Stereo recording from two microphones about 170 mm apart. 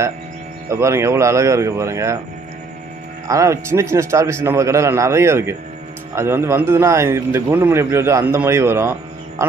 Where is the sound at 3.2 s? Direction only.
20° right (ahead or behind).